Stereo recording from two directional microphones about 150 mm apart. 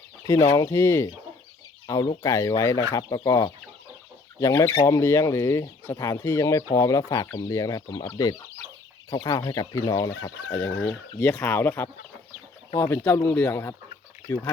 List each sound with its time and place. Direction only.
0.3 s speech: 20° left (ahead or behind)
9.0 s speech: 25° left (ahead or behind)